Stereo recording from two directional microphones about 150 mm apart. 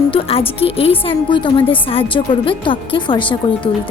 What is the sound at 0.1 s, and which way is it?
A woman's voice, 40° left (ahead or behind).